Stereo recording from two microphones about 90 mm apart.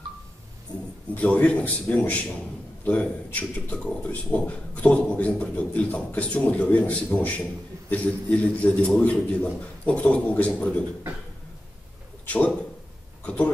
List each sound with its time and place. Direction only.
1.1 s a man's voice: 15° left (ahead or behind)
12.3 s speech: 15° left (ahead or behind)